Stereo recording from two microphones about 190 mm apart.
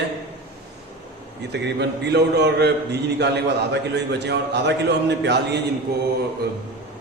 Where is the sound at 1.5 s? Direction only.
65° right (ahead or behind).